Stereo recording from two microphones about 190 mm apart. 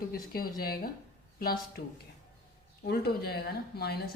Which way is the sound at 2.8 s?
55° left (ahead or behind).